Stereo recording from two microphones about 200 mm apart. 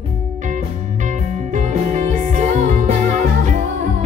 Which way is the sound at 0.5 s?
40° right (ahead or behind).